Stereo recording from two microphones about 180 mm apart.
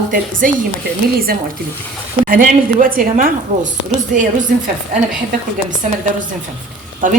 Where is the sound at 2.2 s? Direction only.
50° right (ahead or behind).